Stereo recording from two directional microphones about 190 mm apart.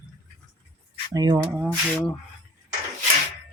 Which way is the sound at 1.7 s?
5° left (ahead or behind).